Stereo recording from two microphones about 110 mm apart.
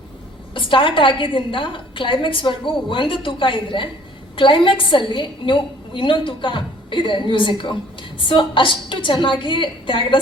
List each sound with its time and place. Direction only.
0.5 s a woman's voice: 50° left (ahead or behind)